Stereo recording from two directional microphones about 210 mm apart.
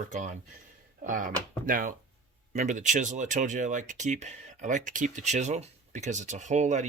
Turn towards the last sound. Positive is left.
turn(degrees=-35)  # may be behind; listen again after turning